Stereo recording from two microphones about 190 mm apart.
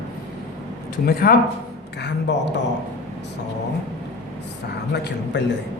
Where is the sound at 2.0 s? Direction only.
65° left (ahead or behind).